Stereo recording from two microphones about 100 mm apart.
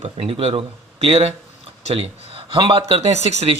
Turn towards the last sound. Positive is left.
turn(degrees=-90)